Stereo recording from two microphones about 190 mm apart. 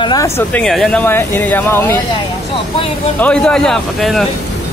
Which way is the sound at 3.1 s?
5° left (ahead or behind).